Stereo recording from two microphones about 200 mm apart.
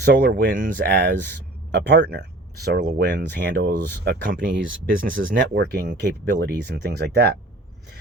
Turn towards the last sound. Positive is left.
turn(degrees=-55)  # may be behind; listen again after turning